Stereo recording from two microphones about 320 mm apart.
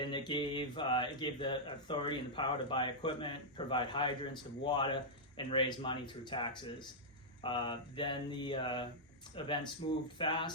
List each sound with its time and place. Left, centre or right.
0.0 s speech: centre